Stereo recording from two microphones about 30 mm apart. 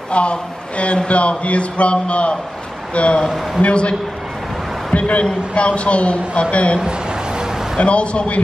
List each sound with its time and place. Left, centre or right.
0.1 s a man's voice: left
3.3 s a man's voice: centre
3.6 s speech: left
4.9 s a sound: left
5.2 s a man's voice: left
6.8 s a sound: right
7.8 s speech: left